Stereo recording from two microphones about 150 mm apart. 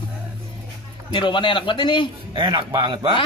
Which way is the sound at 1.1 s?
35° left (ahead or behind).